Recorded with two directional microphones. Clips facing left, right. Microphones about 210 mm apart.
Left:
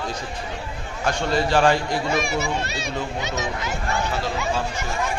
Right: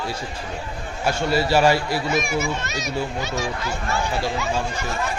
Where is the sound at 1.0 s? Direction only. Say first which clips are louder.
Right 1 dB; 5° right (ahead or behind).